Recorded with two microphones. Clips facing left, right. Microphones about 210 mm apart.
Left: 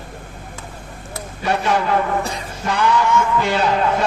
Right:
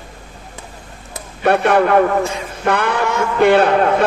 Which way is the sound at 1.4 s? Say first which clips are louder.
Right 6 dB; 60° right (ahead or behind).